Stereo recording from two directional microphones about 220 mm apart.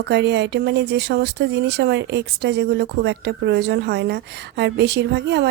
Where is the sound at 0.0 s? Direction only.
50° right (ahead or behind).